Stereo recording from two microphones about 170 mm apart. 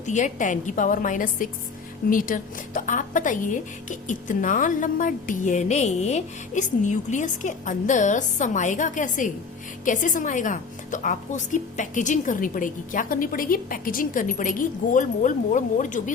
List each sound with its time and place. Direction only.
0.0 s a woman's voice: 45° left (ahead or behind)